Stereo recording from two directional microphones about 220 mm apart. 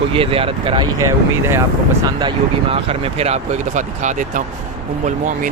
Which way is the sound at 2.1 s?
20° right (ahead or behind).